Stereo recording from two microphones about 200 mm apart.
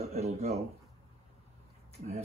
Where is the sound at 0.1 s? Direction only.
30° right (ahead or behind).